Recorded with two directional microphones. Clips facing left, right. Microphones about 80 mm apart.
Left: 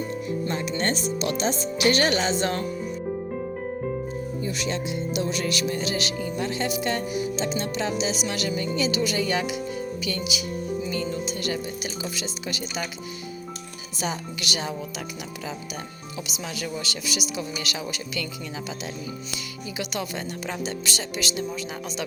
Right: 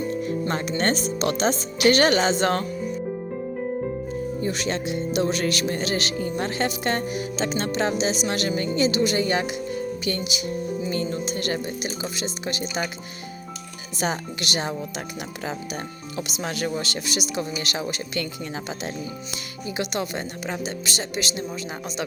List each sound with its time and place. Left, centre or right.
0.4 s speech: right
1.9 s speech: right
4.4 s speech: right
8.8 s speech: right
10.0 s music: right
11.9 s speech: right
13.9 s speech: right
19.7 s speech: right